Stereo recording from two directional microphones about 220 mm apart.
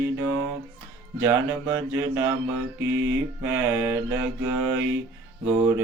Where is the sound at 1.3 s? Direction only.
15° right (ahead or behind).